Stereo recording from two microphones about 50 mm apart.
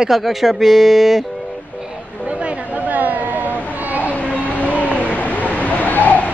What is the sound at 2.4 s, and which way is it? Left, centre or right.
Chatter, right.